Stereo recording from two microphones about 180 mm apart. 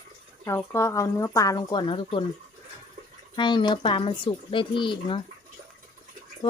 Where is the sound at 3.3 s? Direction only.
25° left (ahead or behind).